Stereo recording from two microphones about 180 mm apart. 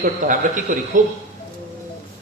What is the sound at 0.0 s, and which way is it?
A man's voice, 45° right (ahead or behind).